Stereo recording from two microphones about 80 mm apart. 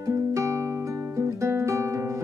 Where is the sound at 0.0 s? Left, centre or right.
Right.